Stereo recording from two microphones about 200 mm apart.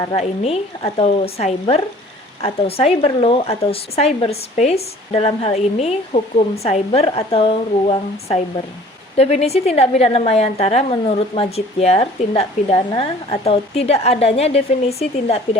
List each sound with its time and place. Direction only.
0.1 s a woman's voice: 30° left (ahead or behind)